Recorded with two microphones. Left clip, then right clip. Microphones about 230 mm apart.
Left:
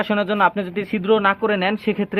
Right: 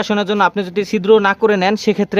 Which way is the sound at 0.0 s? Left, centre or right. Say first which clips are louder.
Right 3 dB; right.